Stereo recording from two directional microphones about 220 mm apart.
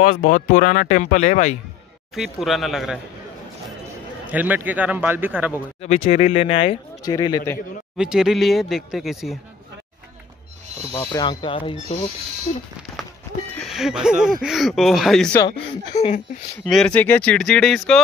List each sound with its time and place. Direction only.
0.0 s speech: 35° left (ahead or behind)
2.1 s speech: centre (ahead or behind)
4.3 s speech: 5° right (ahead or behind)
6.1 s speech: 30° left (ahead or behind)
8.0 s speech: 5° right (ahead or behind)
10.9 s speech: 15° left (ahead or behind)
13.6 s speech: centre (ahead or behind)
15.9 s speech: 30° left (ahead or behind)
16.6 s speech: 5° left (ahead or behind)